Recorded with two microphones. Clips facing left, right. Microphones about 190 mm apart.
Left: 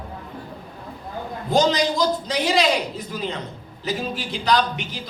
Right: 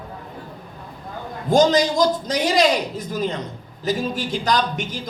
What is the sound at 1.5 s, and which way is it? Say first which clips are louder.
A woman's voice: right 3 dB; 45° right (ahead or behind).